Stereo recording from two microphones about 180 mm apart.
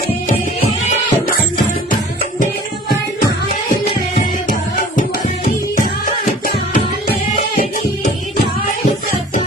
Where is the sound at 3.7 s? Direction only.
45° left (ahead or behind).